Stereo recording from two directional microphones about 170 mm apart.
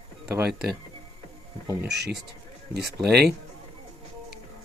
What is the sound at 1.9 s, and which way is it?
Speech, 75° right (ahead or behind).